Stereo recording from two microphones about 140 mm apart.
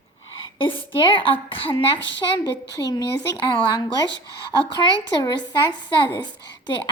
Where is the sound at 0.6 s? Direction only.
40° left (ahead or behind).